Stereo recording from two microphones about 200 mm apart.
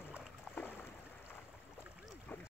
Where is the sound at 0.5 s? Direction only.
10° left (ahead or behind).